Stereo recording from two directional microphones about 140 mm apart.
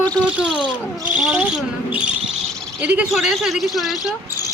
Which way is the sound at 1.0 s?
5° right (ahead or behind).